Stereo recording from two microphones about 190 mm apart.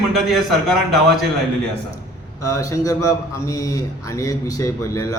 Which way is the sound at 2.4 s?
15° left (ahead or behind).